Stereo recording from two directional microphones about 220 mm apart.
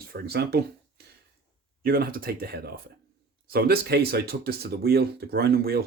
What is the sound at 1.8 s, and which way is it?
Speech, 40° right (ahead or behind).